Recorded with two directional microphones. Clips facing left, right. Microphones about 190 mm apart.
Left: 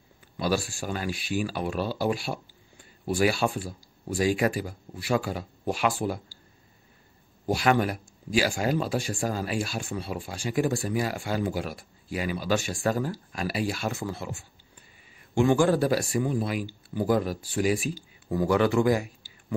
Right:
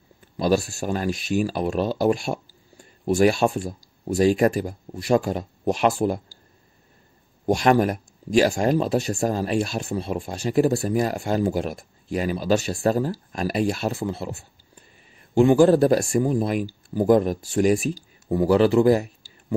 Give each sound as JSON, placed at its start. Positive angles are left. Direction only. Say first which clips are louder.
{"t": 0.4, "sound": "speech", "louder": "right 6 dB", "side_deg": -40}
{"t": 7.4, "sound": "speech", "louder": "right 5 dB", "side_deg": -40}
{"t": 18.3, "sound": "speech", "louder": "right 5 dB", "side_deg": -30}